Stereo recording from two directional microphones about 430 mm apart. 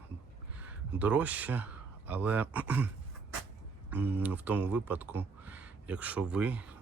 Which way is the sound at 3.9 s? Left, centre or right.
Centre.